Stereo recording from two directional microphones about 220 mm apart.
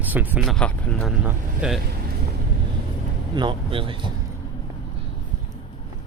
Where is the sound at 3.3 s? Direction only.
20° right (ahead or behind).